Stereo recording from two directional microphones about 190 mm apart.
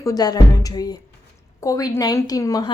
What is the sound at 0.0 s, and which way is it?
A woman's voice, 20° left (ahead or behind).